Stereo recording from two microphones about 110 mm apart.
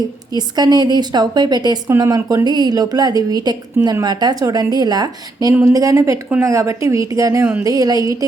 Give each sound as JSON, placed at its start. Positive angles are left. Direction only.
{"t": 0.3, "sound": "speech", "side_deg": -40}